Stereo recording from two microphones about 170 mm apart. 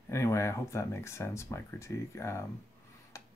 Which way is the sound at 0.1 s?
15° left (ahead or behind).